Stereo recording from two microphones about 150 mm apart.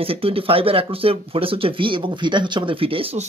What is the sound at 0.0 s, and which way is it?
Speech, 40° right (ahead or behind).